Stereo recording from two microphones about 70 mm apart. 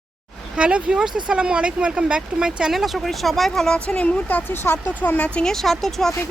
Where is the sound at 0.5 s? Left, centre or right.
Centre.